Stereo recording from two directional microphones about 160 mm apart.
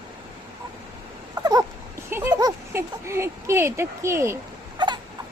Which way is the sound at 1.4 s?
25° right (ahead or behind).